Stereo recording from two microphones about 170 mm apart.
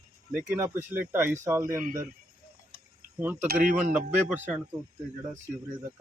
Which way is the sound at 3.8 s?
10° right (ahead or behind).